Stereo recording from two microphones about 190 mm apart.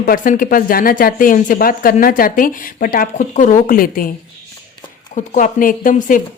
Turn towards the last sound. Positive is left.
turn(degrees=45)  # may be behind; listen again after turning